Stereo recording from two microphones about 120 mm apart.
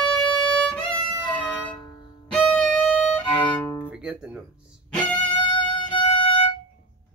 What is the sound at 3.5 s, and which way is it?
Music, 25° left (ahead or behind).